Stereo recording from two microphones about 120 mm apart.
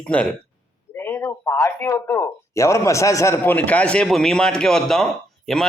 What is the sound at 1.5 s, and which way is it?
A man's voice, 25° left (ahead or behind).